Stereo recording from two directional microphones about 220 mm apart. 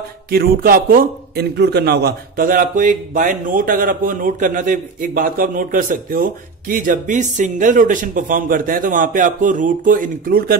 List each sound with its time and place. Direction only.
0.3 s a man's voice: 40° right (ahead or behind)